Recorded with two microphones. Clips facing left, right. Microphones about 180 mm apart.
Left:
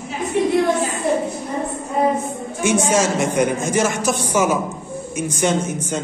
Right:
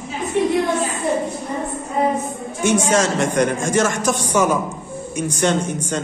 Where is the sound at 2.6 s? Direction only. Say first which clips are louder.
Even; 10° left (ahead or behind).